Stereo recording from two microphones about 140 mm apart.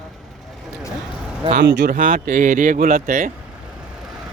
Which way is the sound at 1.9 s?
75° right (ahead or behind).